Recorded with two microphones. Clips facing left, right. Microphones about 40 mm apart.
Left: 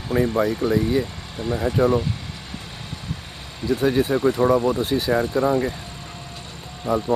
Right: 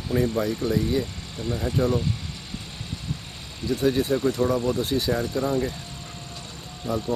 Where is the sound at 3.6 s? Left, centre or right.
Centre.